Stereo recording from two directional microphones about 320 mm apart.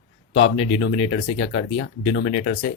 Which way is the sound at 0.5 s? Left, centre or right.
Centre.